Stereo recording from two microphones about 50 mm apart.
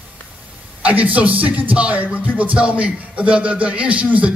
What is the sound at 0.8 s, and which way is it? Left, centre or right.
Speech, right.